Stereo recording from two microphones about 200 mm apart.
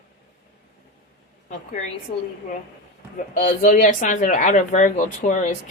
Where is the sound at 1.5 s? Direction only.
35° left (ahead or behind).